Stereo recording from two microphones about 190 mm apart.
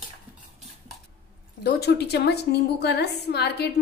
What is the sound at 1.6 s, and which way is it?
A woman's voice, 60° left (ahead or behind).